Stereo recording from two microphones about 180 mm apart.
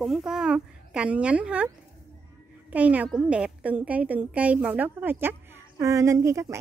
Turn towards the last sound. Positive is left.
turn(degrees=-15)  # may be behind; listen again after turning